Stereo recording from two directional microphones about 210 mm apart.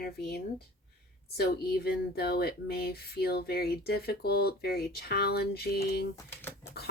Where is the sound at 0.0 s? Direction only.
50° left (ahead or behind).